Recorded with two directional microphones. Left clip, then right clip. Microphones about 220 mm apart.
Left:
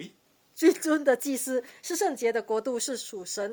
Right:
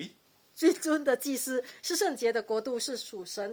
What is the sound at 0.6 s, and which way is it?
Speech, 40° left (ahead or behind).